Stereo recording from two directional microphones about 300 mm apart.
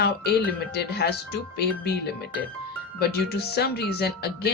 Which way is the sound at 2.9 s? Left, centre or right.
Left.